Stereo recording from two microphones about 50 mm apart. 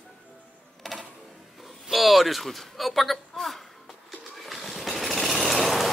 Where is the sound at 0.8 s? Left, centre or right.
Centre.